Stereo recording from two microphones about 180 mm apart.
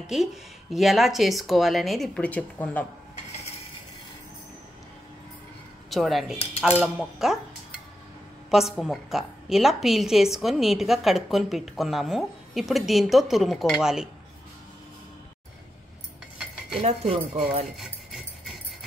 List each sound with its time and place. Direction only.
0.0 s a woman's voice: centre (ahead or behind)
5.9 s a woman's voice: centre (ahead or behind)
8.5 s a woman's voice: centre (ahead or behind)
16.8 s speech: 35° right (ahead or behind)
17.7 s a sound: centre (ahead or behind)